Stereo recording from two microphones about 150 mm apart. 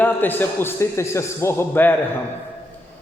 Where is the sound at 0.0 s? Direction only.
10° left (ahead or behind).